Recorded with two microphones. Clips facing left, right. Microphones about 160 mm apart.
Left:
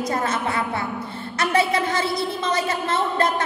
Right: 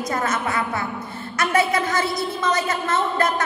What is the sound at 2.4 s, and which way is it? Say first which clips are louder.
Speech: right 2 dB; 25° left (ahead or behind).